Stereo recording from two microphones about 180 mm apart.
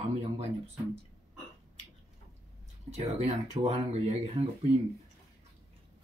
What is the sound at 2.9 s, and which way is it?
Speech, 35° right (ahead or behind).